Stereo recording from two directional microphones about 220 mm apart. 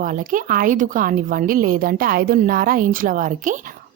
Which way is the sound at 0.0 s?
35° right (ahead or behind).